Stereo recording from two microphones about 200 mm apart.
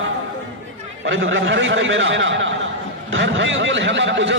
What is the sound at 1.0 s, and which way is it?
A man's voice, 70° right (ahead or behind).